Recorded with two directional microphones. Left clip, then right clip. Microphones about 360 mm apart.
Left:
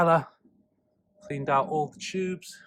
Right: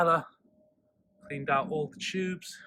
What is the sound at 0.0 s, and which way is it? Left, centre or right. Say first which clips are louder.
Speech: left 3 dB; centre.